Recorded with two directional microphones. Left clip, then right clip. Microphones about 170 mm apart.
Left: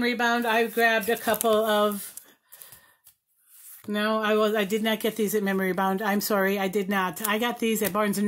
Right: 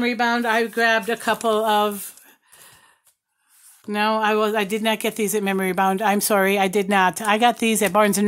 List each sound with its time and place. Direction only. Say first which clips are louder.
0.0 s speech: right 4 dB; 40° right (ahead or behind); by 2.0 s 25° right (ahead or behind)
3.9 s speech: right 5 dB; 30° right (ahead or behind); by 8.3 s 50° right (ahead or behind)